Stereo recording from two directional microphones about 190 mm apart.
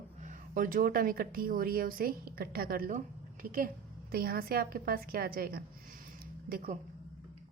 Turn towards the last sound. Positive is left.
turn(degrees=-50)  # may be behind; listen again after turning